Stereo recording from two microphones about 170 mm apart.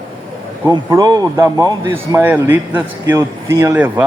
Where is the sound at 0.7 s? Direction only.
25° right (ahead or behind).